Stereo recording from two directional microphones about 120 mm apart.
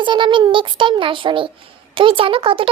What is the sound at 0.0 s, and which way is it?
A child's voice, 45° right (ahead or behind).